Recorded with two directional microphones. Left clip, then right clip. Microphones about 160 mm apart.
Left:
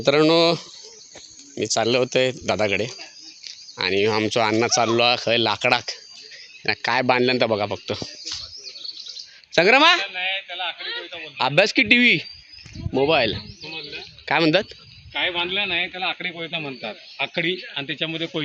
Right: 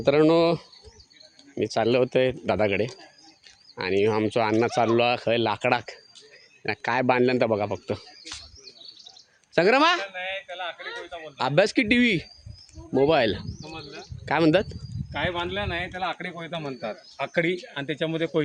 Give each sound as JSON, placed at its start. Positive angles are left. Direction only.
{"t": 0.0, "sound": "speech", "side_deg": -5}
{"t": 4.7, "sound": "speech", "side_deg": -10}
{"t": 9.5, "sound": "speech", "side_deg": 0}
{"t": 10.2, "sound": "a sound", "side_deg": -60}
{"t": 11.3, "sound": "speech", "side_deg": -10}
{"t": 13.1, "sound": "speech", "side_deg": -20}
{"t": 13.7, "sound": "bird", "side_deg": -15}
{"t": 15.1, "sound": "speech", "side_deg": -10}
{"t": 17.3, "sound": "speech", "side_deg": -55}